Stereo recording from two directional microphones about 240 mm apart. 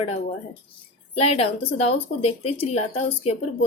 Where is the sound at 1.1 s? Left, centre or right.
Left.